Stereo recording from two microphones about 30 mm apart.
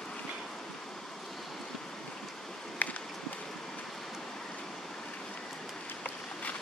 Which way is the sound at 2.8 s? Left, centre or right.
Left.